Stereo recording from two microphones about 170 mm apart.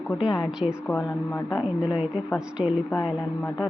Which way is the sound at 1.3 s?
25° left (ahead or behind).